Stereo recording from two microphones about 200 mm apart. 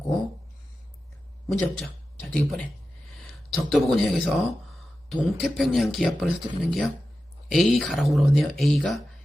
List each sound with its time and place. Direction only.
1.5 s speech: 5° left (ahead or behind)
3.7 s speech: centre (ahead or behind)